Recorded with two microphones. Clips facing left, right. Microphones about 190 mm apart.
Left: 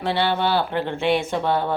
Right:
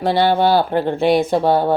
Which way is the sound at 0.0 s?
40° right (ahead or behind).